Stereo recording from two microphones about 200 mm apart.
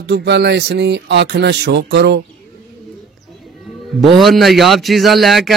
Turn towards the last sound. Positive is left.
turn(degrees=0)  # may be behind; listen again after turning